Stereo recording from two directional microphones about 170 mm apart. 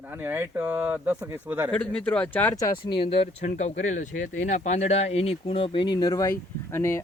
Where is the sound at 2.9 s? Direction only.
30° left (ahead or behind); by 7.0 s 15° left (ahead or behind).